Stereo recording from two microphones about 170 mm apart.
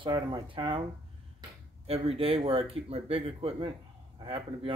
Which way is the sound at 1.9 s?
35° right (ahead or behind).